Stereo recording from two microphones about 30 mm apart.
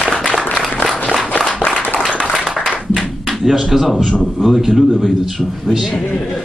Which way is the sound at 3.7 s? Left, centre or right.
Centre.